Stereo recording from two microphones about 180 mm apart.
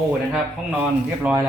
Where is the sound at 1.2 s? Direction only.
10° right (ahead or behind).